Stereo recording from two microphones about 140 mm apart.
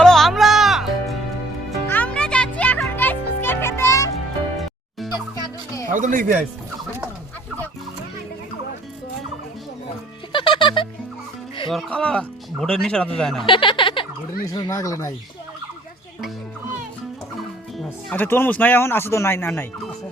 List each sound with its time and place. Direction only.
0.0 s music: centre (ahead or behind)
1.9 s music: 10° left (ahead or behind)
5.9 s speech: 70° right (ahead or behind)
10.3 s music: 35° left (ahead or behind)
11.7 s speech: 5° left (ahead or behind)
13.4 s a sound: 35° left (ahead or behind)
14.4 s speech: 25° left (ahead or behind)
18.1 s speech: 15° left (ahead or behind)